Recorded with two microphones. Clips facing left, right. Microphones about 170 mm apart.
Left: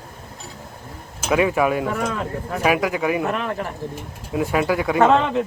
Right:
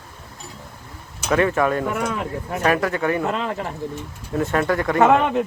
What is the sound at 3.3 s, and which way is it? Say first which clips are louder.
Speech: even; 20° right (ahead or behind).